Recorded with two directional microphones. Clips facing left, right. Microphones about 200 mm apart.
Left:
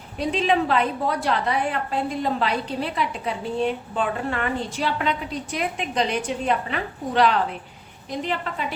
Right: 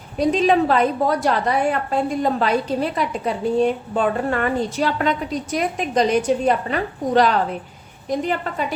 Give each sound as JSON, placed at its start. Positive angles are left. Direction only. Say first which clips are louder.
{"t": 0.2, "sound": "a woman's voice", "louder": "right 5 dB", "side_deg": -45}